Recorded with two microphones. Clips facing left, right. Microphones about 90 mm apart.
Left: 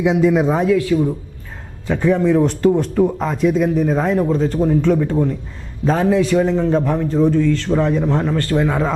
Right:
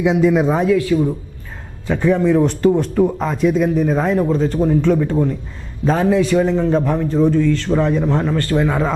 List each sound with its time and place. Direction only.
0.0 s speech: 15° right (ahead or behind)